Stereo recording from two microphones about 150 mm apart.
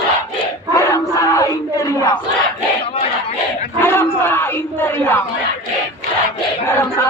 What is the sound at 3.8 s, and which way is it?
Battle cry, 15° left (ahead or behind).